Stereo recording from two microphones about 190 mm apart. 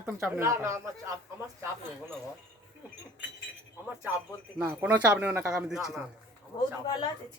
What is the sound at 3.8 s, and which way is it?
Wind chime, 10° right (ahead or behind).